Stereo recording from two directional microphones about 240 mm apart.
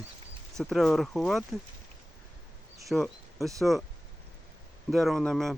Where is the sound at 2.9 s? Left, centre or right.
Centre.